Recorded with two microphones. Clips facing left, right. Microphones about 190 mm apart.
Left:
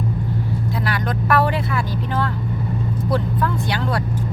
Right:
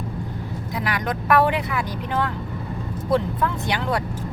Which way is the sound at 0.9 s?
15° right (ahead or behind).